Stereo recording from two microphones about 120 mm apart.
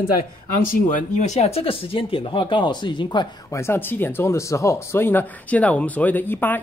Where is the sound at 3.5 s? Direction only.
20° left (ahead or behind).